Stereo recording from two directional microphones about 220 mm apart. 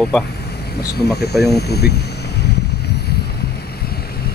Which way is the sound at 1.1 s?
45° left (ahead or behind).